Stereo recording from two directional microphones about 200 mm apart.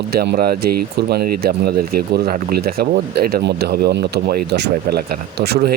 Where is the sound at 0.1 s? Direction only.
50° right (ahead or behind).